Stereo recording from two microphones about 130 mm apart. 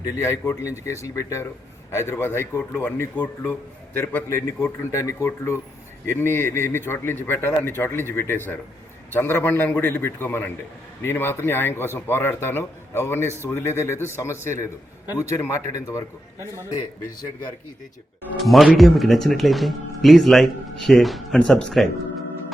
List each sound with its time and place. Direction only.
0.0 s a man's voice: 20° left (ahead or behind)
18.3 s speech: centre (ahead or behind)